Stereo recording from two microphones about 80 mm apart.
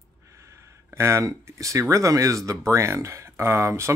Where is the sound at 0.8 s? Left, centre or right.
Right.